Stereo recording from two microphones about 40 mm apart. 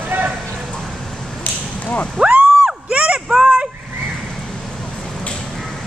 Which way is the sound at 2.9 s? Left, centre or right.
Right.